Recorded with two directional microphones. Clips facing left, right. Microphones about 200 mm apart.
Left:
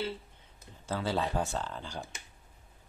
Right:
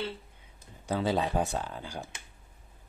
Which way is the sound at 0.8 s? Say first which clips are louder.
Right 3 dB; 15° right (ahead or behind).